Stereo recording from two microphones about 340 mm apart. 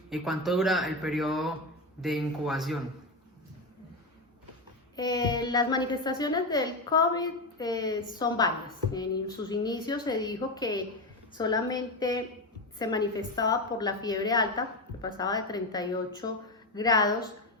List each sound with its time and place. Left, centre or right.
0.1 s speech: centre
4.9 s a child's voice: centre